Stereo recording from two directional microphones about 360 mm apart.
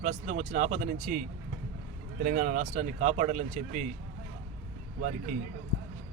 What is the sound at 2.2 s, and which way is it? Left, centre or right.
Speech, right.